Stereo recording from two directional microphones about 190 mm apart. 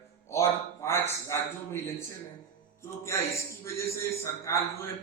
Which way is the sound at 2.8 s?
15° left (ahead or behind).